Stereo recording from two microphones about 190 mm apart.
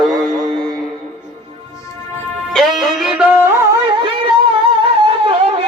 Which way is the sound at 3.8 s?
25° right (ahead or behind).